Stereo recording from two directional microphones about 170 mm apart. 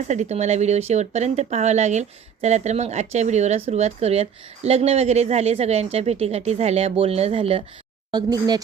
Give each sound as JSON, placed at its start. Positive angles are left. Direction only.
{"t": 0.1, "sound": "speech", "side_deg": -40}
{"t": 8.1, "sound": "speech", "side_deg": -20}